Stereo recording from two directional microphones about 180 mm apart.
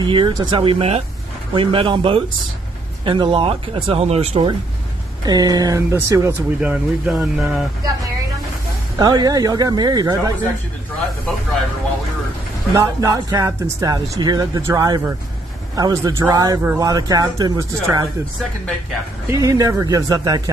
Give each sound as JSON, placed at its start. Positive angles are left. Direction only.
{"t": 0.0, "sound": "speech", "side_deg": -25}
{"t": 5.2, "sound": "speech", "side_deg": -20}
{"t": 6.7, "sound": "speech", "side_deg": -5}
{"t": 8.9, "sound": "speech", "side_deg": -20}
{"t": 12.7, "sound": "speech", "side_deg": -20}
{"t": 19.2, "sound": "speech", "side_deg": -20}